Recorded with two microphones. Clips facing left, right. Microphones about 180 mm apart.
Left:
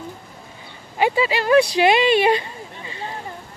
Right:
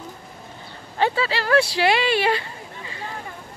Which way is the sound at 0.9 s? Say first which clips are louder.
Left 3 dB; 15° left (ahead or behind).